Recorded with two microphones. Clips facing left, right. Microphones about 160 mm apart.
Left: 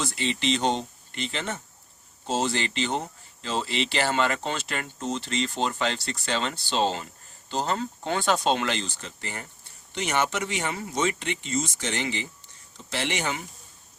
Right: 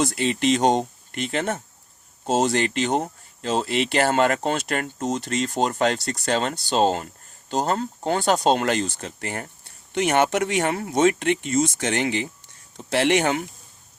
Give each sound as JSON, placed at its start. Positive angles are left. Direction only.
{"t": 0.0, "sound": "speech", "side_deg": -50}